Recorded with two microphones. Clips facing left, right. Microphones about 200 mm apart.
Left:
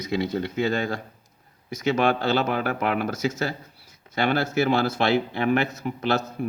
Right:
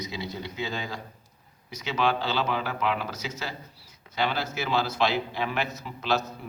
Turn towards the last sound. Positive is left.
turn(degrees=55)  # may be behind; listen again after turning